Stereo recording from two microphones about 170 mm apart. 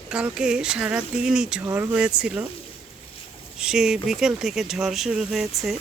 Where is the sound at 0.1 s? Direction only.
5° right (ahead or behind).